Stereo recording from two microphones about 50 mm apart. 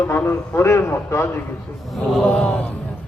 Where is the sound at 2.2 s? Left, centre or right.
Left.